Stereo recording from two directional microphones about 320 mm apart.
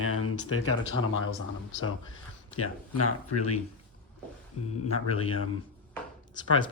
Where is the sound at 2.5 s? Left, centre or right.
Left.